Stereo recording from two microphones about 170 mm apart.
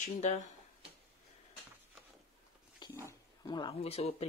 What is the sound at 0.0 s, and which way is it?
Speech, 40° left (ahead or behind).